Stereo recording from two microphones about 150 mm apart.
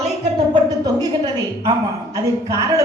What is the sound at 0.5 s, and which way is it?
Speech, 25° right (ahead or behind).